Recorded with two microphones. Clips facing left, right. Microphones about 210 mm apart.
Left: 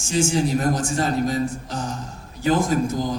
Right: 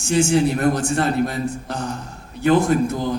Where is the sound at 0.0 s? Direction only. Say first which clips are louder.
Right 4 dB; 60° right (ahead or behind).